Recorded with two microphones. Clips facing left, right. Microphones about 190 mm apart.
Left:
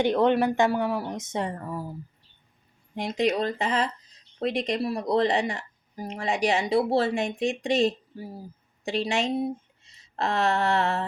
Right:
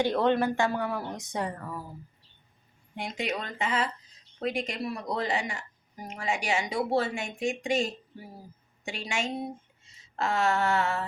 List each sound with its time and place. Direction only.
0.0 s a woman's voice: 15° left (ahead or behind)
2.9 s a woman's voice: 35° left (ahead or behind)
9.8 s a sound: 35° left (ahead or behind)